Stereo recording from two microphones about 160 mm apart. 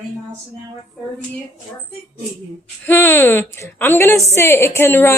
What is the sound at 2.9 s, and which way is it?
A woman's voice, 15° left (ahead or behind).